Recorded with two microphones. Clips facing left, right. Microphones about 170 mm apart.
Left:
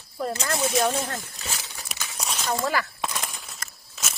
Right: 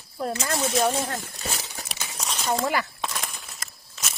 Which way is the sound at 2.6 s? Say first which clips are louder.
Left 1 dB; 20° right (ahead or behind).